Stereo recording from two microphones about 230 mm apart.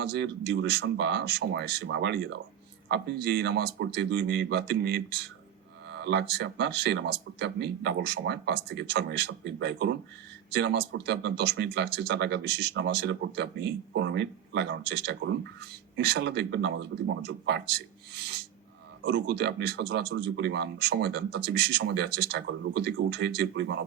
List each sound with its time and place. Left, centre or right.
0.0 s speech: right